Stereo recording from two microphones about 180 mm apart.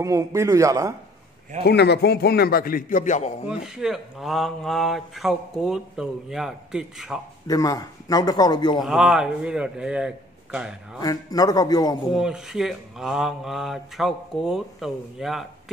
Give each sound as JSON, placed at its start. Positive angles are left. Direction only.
{"t": 0.0, "sound": "a man's voice", "side_deg": -15}
{"t": 1.6, "sound": "a man's voice", "side_deg": 65}
{"t": 3.6, "sound": "speech", "side_deg": -5}
{"t": 7.4, "sound": "speech", "side_deg": 20}
{"t": 8.8, "sound": "speech", "side_deg": -5}
{"t": 11.0, "sound": "speech", "side_deg": 20}
{"t": 12.1, "sound": "speech", "side_deg": -5}